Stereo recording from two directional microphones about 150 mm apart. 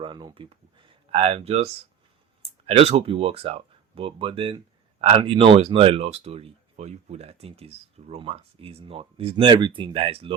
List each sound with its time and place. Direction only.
0.0 s speech: 30° right (ahead or behind)